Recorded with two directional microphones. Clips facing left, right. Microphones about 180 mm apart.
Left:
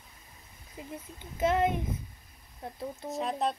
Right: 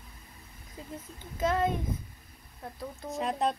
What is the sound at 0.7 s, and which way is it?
Speech, 20° left (ahead or behind).